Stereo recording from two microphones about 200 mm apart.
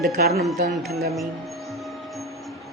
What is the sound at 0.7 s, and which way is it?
Speech, centre (ahead or behind).